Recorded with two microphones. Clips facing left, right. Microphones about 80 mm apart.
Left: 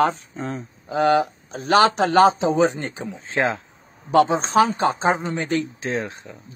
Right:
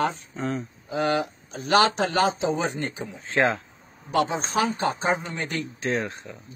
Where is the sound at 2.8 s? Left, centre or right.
Left.